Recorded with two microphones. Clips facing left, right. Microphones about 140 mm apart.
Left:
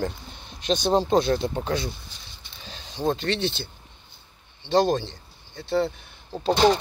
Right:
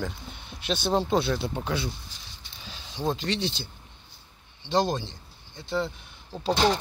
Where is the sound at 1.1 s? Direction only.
45° left (ahead or behind).